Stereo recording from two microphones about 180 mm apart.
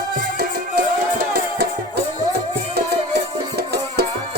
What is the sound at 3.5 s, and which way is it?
Music, 60° right (ahead or behind).